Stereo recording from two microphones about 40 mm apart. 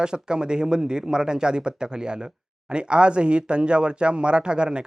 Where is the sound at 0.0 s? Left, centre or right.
Right.